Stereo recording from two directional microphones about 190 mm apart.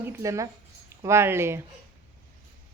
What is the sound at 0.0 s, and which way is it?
Speech, 15° right (ahead or behind).